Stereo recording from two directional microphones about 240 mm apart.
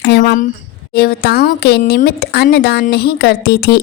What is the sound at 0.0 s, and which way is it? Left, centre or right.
Speech, left.